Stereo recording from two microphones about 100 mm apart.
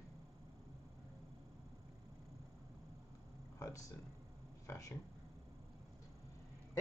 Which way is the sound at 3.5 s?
30° left (ahead or behind).